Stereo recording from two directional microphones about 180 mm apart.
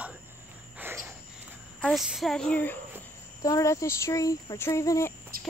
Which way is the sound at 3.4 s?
20° left (ahead or behind).